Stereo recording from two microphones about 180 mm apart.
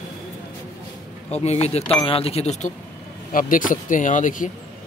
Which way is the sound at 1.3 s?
35° left (ahead or behind).